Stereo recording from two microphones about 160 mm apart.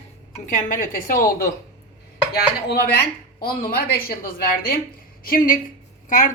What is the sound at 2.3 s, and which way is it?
A woman's voice, 80° left.